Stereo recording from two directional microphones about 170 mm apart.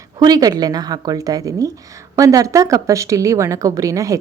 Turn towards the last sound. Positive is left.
turn(degrees=-20)  # may be behind; listen again after turning